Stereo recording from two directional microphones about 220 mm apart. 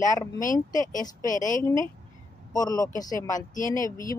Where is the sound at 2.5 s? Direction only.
15° left (ahead or behind).